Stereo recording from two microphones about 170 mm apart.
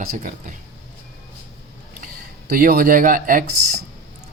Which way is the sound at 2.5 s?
60° right (ahead or behind).